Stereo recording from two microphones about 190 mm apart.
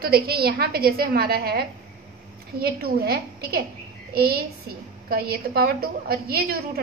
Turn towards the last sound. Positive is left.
turn(degrees=-55)  # may be behind; listen again after turning